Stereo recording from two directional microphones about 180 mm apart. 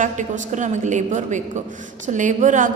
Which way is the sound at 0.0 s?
45° right (ahead or behind).